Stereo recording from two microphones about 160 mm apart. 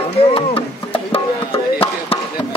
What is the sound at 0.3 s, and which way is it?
Music, 35° left (ahead or behind).